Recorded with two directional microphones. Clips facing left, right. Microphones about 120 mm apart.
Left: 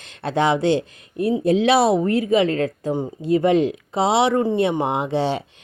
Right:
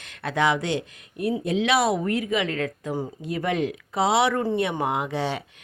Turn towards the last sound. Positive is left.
turn(degrees=25)  # may be behind; listen again after turning